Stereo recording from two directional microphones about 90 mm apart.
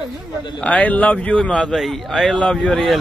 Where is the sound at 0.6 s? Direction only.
15° left (ahead or behind).